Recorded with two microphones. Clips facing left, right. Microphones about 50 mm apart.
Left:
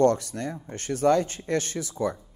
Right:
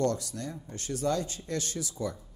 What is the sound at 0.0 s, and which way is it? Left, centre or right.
Speech, left.